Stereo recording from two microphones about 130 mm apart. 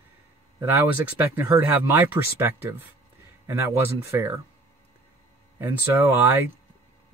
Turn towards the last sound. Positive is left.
turn(degrees=-15)  # may be behind; listen again after turning